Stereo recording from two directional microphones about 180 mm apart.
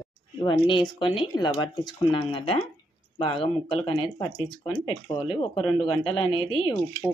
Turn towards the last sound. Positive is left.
turn(degrees=25)  # may be behind; listen again after turning